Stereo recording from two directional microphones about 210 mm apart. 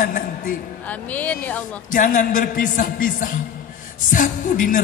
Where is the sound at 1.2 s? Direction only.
10° left (ahead or behind).